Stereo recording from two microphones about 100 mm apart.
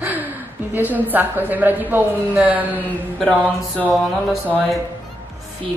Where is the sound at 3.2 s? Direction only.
10° left (ahead or behind).